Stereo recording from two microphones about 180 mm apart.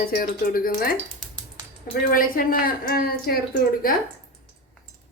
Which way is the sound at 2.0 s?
50° left (ahead or behind).